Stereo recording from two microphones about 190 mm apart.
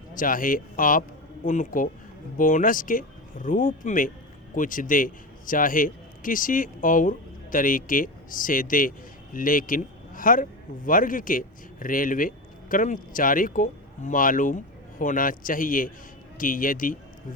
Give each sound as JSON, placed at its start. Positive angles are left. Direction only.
{"t": 0.1, "sound": "a man's voice", "side_deg": 45}